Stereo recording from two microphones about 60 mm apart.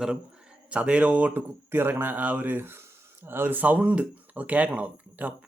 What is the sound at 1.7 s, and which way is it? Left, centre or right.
Speech, right.